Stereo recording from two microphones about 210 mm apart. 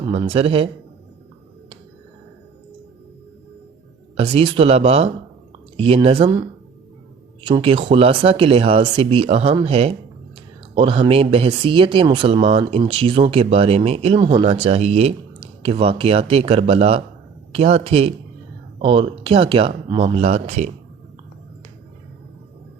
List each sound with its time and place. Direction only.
0.1 s speech: 30° right (ahead or behind)
4.2 s speech: 25° right (ahead or behind)
7.4 s speech: 25° right (ahead or behind)